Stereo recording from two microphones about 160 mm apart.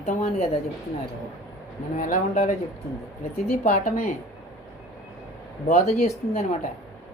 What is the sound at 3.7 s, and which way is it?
Speech, 50° left (ahead or behind).